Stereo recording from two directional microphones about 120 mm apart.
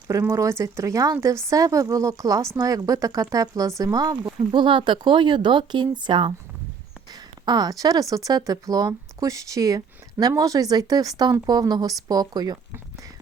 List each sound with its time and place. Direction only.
0.1 s speech: 25° right (ahead or behind)
4.5 s speech: 45° right (ahead or behind)
7.1 s a sound: 35° right (ahead or behind)
8.1 s speech: 30° right (ahead or behind)